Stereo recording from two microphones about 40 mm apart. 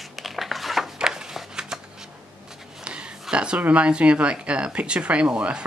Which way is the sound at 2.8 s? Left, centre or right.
Right.